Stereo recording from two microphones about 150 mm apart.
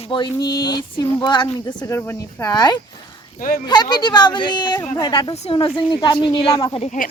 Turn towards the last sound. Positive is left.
turn(degrees=55)  # may be behind; listen again after turning